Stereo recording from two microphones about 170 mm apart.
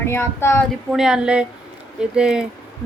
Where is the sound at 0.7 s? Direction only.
Centre (ahead or behind).